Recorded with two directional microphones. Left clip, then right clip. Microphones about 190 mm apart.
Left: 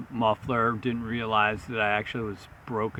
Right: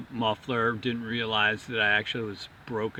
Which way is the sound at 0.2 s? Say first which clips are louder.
Left 2 dB; 10° left (ahead or behind).